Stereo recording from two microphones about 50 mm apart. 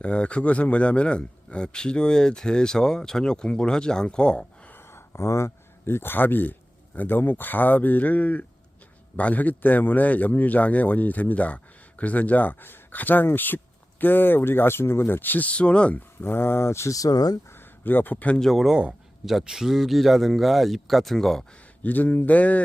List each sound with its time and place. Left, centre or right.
0.0 s speech: left
4.7 s a man's voice: left
16.2 s speech: left
17.5 s speech: left
18.3 s speech: centre
19.2 s speech: centre
21.8 s a man's voice: left